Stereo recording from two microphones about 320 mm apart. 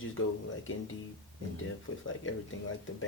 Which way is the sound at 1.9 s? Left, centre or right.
Left.